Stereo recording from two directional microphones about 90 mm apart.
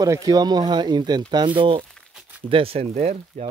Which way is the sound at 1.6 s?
70° right (ahead or behind).